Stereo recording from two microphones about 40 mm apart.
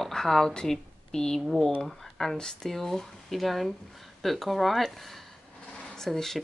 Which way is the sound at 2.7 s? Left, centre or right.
Centre.